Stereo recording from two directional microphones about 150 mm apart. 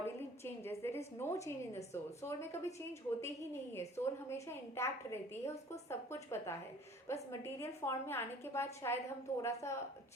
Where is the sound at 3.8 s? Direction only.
15° left (ahead or behind).